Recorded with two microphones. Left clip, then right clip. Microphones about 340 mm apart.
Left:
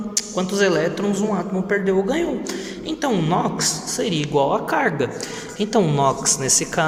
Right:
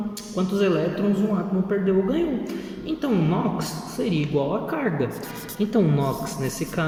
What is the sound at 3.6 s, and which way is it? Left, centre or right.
Speech, centre.